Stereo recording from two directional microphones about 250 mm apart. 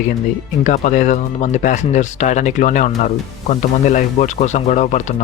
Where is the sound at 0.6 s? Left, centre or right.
Left.